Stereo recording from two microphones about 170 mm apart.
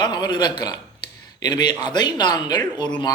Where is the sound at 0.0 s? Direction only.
25° left (ahead or behind).